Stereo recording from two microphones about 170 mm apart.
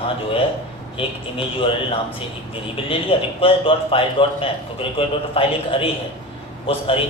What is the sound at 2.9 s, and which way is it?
A man's voice, 35° left (ahead or behind).